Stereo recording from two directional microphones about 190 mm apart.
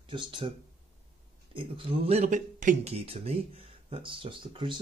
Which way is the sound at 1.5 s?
30° right (ahead or behind).